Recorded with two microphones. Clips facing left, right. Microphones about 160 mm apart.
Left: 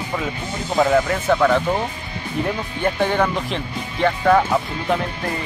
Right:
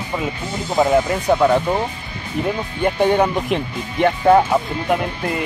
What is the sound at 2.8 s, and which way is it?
Speech, 20° right (ahead or behind).